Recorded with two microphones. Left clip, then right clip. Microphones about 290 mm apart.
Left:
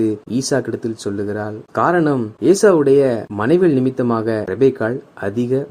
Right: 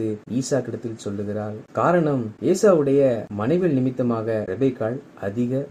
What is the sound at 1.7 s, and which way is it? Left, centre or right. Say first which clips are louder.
Speech: left 4 dB; left.